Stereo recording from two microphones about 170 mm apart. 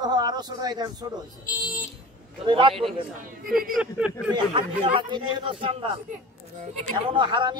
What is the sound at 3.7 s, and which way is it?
Speech, 5° right (ahead or behind).